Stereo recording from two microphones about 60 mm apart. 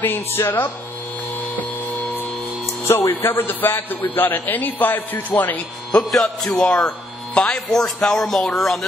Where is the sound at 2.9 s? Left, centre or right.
Left.